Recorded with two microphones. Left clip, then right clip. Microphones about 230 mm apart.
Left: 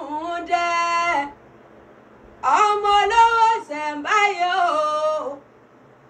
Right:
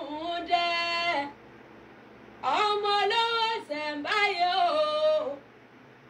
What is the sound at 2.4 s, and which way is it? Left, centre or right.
Female singing, centre.